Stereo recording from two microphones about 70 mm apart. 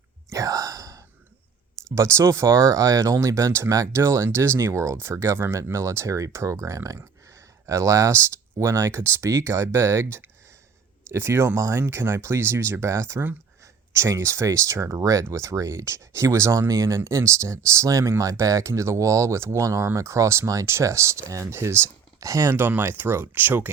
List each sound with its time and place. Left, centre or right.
0.3 s sigh: right
2.0 s speech: right
22.5 s speech: right